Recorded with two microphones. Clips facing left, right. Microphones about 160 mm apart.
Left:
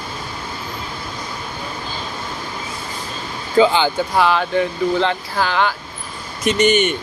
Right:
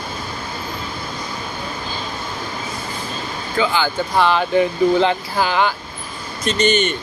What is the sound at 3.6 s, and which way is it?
Speech, 25° left (ahead or behind).